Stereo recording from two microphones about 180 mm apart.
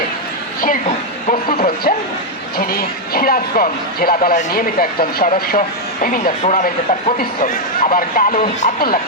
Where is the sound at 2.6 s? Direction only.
55° left (ahead or behind).